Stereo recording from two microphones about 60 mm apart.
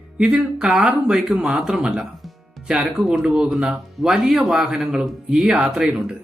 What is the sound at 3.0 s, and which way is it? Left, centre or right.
Speech, centre.